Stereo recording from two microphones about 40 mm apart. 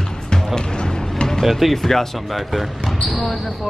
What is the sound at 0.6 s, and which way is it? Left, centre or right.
Music, centre.